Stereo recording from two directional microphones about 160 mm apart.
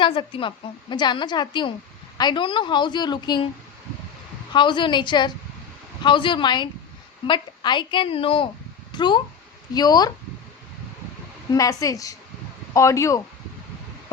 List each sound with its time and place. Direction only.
0.0 s a woman's voice: 30° left (ahead or behind)
4.5 s a woman's voice: 30° left (ahead or behind)
11.5 s a woman's voice: 20° left (ahead or behind)